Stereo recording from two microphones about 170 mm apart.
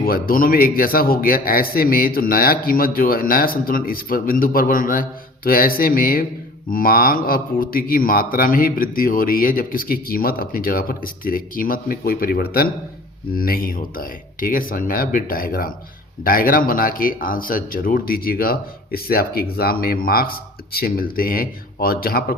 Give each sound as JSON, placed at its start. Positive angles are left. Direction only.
{"t": 0.0, "sound": "speech", "side_deg": 60}